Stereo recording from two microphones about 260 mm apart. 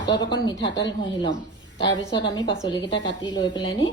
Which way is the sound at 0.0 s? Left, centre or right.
Centre.